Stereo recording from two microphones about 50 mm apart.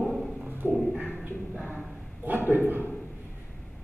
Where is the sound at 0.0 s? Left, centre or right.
Centre.